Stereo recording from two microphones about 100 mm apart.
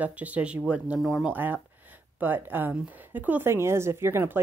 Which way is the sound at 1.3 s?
20° right (ahead or behind).